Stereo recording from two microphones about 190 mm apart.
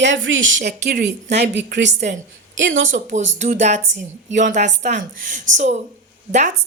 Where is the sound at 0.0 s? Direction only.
80° right.